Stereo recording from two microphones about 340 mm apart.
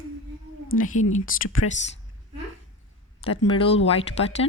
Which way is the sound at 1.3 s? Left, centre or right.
Left.